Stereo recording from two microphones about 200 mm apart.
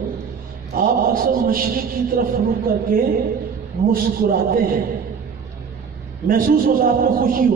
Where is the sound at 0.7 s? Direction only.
45° right (ahead or behind).